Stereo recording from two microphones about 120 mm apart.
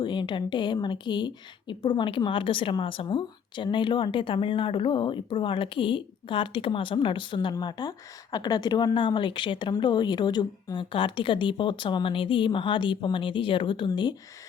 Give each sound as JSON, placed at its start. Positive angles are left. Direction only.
{"t": 0.0, "sound": "a woman's voice", "side_deg": 40}